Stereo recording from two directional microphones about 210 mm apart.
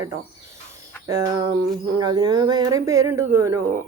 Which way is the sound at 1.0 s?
15° right (ahead or behind).